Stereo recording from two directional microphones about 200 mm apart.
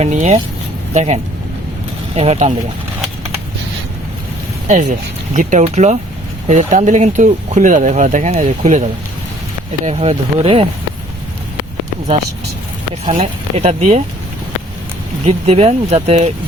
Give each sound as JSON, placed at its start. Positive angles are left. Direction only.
{"t": 0.0, "sound": "speech", "side_deg": -35}
{"t": 4.7, "sound": "speech", "side_deg": -40}
{"t": 13.1, "sound": "speech", "side_deg": -30}
{"t": 15.3, "sound": "speech", "side_deg": -30}